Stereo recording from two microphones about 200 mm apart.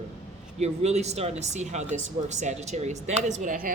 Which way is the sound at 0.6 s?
35° right (ahead or behind).